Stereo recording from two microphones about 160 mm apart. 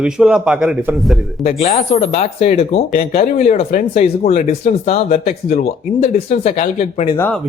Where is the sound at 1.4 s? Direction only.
45° left (ahead or behind).